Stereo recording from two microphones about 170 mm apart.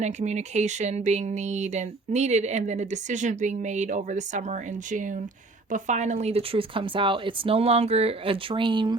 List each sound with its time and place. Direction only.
0.0 s speech: 45° right (ahead or behind)